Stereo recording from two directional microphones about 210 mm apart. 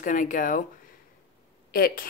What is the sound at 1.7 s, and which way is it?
Speech, 45° left (ahead or behind).